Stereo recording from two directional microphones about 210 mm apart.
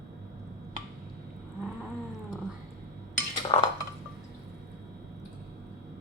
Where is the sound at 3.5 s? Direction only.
25° left (ahead or behind).